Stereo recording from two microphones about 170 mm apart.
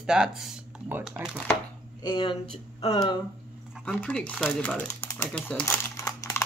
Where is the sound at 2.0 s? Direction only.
30° left (ahead or behind).